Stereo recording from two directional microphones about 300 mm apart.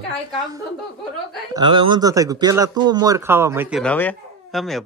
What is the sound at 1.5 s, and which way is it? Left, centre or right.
Speech, centre.